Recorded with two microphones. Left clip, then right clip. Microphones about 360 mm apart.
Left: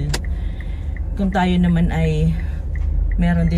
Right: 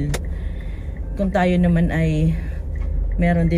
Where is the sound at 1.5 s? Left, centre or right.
Centre.